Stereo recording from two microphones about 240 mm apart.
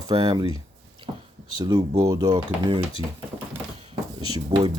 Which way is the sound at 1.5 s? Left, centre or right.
Centre.